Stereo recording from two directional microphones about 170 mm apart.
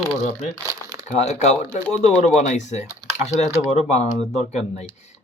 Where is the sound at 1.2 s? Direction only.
40° left (ahead or behind).